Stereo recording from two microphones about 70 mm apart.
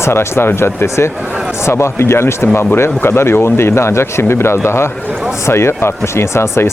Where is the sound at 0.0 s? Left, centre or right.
Left.